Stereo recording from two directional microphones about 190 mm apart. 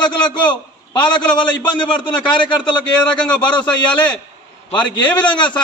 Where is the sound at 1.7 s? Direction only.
25° left (ahead or behind).